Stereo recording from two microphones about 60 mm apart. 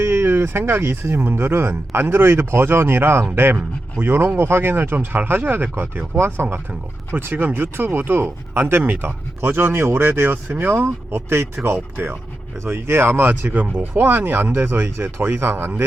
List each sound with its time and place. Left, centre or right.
0.0 s speech: right
6.1 s speech: right